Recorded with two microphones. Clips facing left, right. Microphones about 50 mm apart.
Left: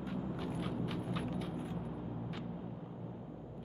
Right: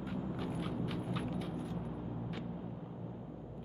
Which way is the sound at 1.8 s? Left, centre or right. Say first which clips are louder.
Even; centre.